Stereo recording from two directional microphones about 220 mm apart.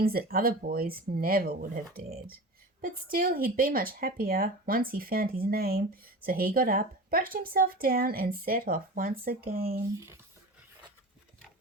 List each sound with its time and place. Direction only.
0.0 s speech: 45° right (ahead or behind)